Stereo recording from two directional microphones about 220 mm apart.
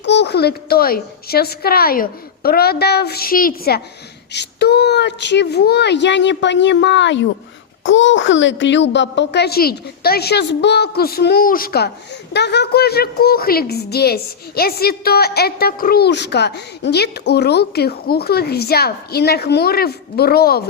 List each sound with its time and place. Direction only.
0.0 s a woman's voice: 50° left (ahead or behind)